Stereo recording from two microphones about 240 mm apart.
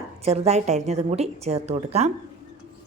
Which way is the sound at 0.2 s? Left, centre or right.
Right.